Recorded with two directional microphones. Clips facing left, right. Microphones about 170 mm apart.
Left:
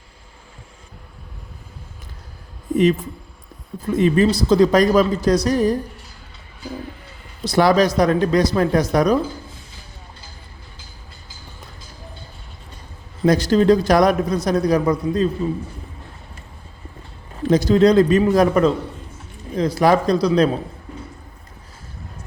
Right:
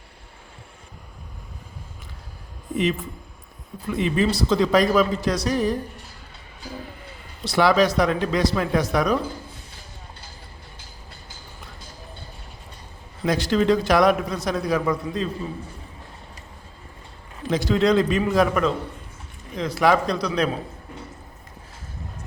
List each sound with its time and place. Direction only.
3.8 s a man's voice: 45° left (ahead or behind)
7.4 s a man's voice: 40° left (ahead or behind)
13.2 s a man's voice: 40° left (ahead or behind)
17.5 s a man's voice: 40° left (ahead or behind)